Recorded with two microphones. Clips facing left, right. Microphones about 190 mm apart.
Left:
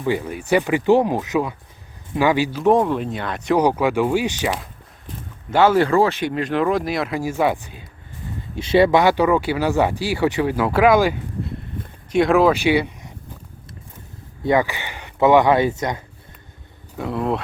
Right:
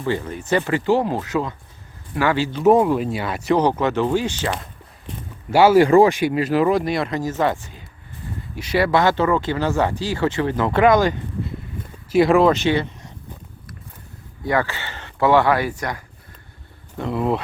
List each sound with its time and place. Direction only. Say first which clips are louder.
0.0 s speech: left 1 dB; 15° left (ahead or behind)
2.6 s speech: right 5 dB; 5° right (ahead or behind)
3.6 s speech: left 4 dB; 10° left (ahead or behind)
5.5 s speech: right 3 dB; 10° right (ahead or behind); by 7.9 s 15° left (ahead or behind)
8.5 s speech: left 4 dB; 25° left (ahead or behind)
14.4 s speech: left 3 dB; 15° left (ahead or behind)
17.0 s speech: right 1 dB; centre (ahead or behind)